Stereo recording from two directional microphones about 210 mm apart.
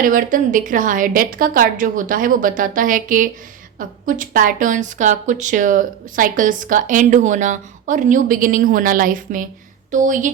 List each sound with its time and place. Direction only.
0.0 s a woman's voice: 40° right (ahead or behind)